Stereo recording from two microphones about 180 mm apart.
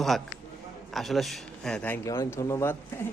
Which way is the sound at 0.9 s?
Centre (ahead or behind).